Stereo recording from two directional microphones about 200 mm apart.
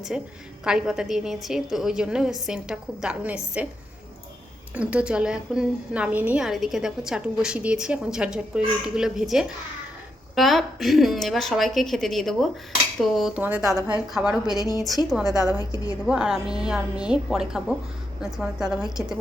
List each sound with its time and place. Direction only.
0.1 s a woman's voice: 5° right (ahead or behind)
4.7 s a woman's voice: 5° right (ahead or behind)
14.6 s a woman's voice: 15° left (ahead or behind)
14.8 s a woman's voice: centre (ahead or behind)
15.7 s a woman's voice: 15° left (ahead or behind)
16.0 s a woman's voice: 5° right (ahead or behind)